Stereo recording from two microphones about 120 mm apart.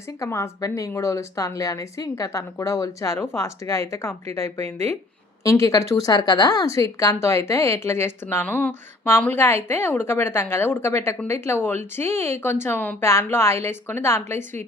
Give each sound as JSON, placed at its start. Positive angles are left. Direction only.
{"t": 0.2, "sound": "a woman's voice", "side_deg": 25}